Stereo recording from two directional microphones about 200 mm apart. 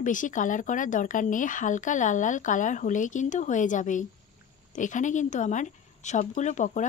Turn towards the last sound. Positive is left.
turn(degrees=35)  # may be behind; listen again after turning